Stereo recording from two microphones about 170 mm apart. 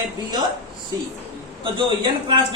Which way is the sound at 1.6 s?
30° right (ahead or behind).